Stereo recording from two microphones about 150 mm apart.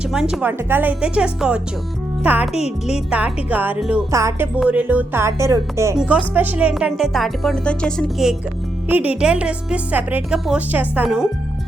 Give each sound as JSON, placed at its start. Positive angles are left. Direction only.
{"t": 0.1, "sound": "speech", "side_deg": -5}
{"t": 4.1, "sound": "music", "side_deg": -20}
{"t": 4.5, "sound": "speech", "side_deg": -10}